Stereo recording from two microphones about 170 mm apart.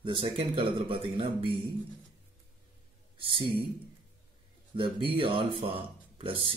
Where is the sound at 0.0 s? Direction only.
30° right (ahead or behind).